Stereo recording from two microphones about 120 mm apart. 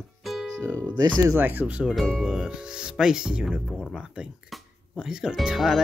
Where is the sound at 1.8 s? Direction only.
Centre (ahead or behind).